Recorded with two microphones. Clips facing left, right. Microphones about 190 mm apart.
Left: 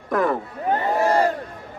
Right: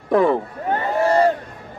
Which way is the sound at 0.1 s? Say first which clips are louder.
Right 5 dB; 30° right (ahead or behind).